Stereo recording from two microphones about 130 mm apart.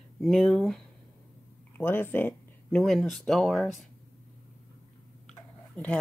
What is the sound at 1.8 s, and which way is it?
Speech, 15° left (ahead or behind).